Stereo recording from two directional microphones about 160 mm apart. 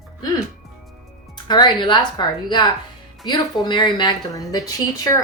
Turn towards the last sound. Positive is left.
turn(degrees=25)  # may be behind; listen again after turning